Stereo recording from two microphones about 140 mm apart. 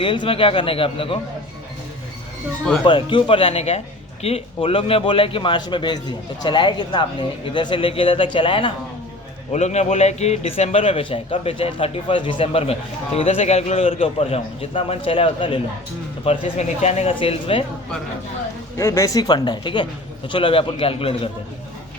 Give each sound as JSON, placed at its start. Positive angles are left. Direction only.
{"t": 0.0, "sound": "a man's voice", "side_deg": 35}
{"t": 2.8, "sound": "a man's voice", "side_deg": 35}
{"t": 9.5, "sound": "a man's voice", "side_deg": 55}
{"t": 18.8, "sound": "a man's voice", "side_deg": 25}